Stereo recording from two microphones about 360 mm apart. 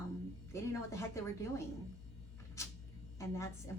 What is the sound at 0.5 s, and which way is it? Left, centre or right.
A woman's voice, centre.